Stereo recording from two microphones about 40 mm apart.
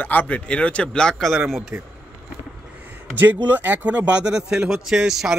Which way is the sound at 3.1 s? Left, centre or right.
Right.